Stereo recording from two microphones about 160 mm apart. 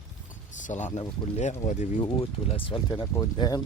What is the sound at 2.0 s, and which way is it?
Speech, 35° left (ahead or behind).